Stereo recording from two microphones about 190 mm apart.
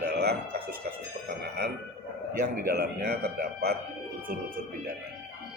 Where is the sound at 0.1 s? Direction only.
60° right (ahead or behind).